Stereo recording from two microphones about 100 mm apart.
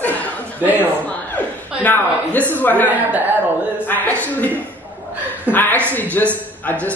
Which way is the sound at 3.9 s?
15° left (ahead or behind).